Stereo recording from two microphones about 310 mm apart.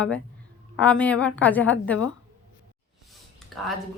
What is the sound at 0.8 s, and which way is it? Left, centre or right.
Speech, centre.